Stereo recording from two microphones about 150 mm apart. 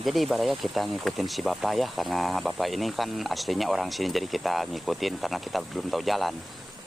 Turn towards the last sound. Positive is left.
turn(degrees=0)  # may be behind; listen again after turning